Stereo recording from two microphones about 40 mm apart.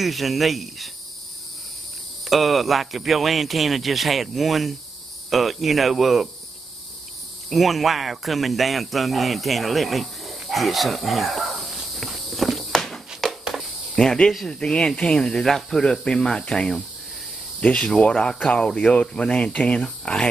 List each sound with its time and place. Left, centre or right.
0.0 s speech: centre
2.2 s speech: centre
7.4 s speech: centre
10.5 s a sound: centre
12.1 s walk: centre
12.7 s a sound: centre
13.4 s a sound: centre
13.9 s speech: centre
15.8 s speech: left
17.7 s speech: left